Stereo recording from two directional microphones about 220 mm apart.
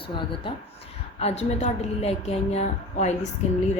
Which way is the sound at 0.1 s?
20° left (ahead or behind).